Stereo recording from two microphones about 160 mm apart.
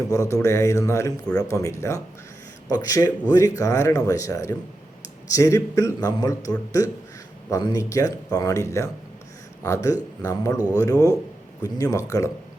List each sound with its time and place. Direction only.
0.1 s speech: 20° left (ahead or behind)
7.5 s speech: 25° left (ahead or behind)